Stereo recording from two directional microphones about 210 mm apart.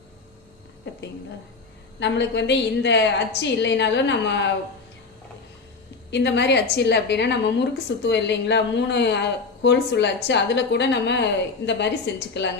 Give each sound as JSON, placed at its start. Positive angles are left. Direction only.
{"t": 2.0, "sound": "a woman's voice", "side_deg": 55}
{"t": 6.1, "sound": "a woman's voice", "side_deg": 55}